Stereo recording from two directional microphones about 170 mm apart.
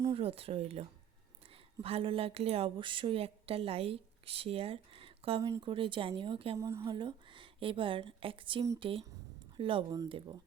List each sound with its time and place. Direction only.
0.1 s speech: 35° right (ahead or behind)
6.6 s speech: 15° right (ahead or behind)
6.8 s a woman's voice: 30° right (ahead or behind)